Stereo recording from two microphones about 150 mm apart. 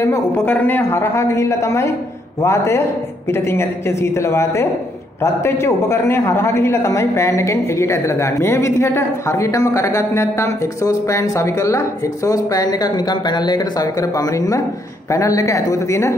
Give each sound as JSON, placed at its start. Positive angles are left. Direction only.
{"t": 0.0, "sound": "a woman's voice", "side_deg": 15}